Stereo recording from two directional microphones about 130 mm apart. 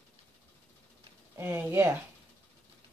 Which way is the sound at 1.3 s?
15° right (ahead or behind).